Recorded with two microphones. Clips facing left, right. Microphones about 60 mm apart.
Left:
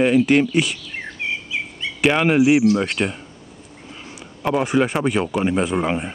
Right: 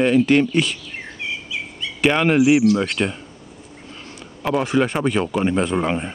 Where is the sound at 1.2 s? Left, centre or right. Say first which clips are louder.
Left 2 dB; left.